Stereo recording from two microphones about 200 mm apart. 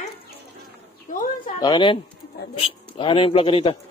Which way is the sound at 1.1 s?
40° left (ahead or behind).